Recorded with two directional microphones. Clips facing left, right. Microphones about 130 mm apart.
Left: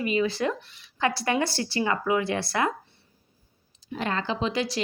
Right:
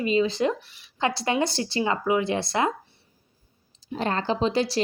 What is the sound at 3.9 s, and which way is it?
Speech, 35° right (ahead or behind).